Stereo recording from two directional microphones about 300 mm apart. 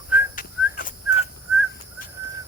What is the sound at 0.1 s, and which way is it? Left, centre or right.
Whistling, centre.